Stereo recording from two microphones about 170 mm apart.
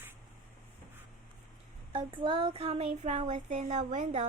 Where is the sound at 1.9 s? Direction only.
30° right (ahead or behind).